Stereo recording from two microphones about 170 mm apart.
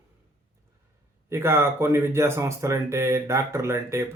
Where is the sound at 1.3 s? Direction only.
15° right (ahead or behind).